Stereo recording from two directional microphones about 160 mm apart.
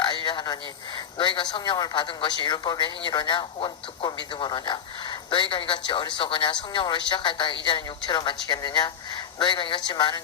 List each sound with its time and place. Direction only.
0.0 s a man's voice: 30° left (ahead or behind)